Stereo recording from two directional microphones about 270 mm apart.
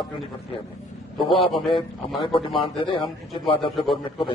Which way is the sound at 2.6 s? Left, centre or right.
Centre.